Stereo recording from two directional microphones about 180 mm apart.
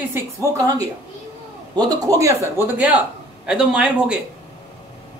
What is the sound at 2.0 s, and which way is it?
Speech, 20° right (ahead or behind).